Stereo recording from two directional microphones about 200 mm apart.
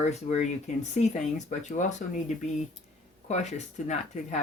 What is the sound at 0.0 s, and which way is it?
Speech, 35° left (ahead or behind).